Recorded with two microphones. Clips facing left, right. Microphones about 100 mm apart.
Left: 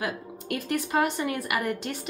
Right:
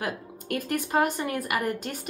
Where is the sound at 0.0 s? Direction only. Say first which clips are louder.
Left 1 dB; 45° right (ahead or behind).